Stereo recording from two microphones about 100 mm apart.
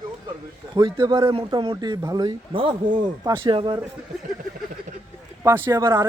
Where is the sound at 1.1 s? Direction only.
55° right (ahead or behind).